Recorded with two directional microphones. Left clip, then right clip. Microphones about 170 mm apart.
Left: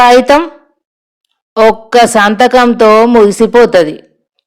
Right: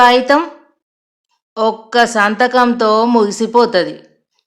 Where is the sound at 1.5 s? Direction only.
35° left (ahead or behind).